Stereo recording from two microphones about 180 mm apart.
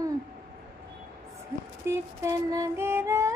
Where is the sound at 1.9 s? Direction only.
15° right (ahead or behind).